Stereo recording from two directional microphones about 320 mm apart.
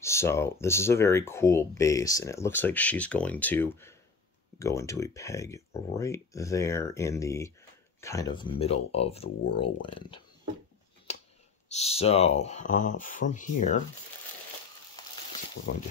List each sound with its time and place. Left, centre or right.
0.0 s speech: centre
11.1 s a sound: left
11.7 s speech: centre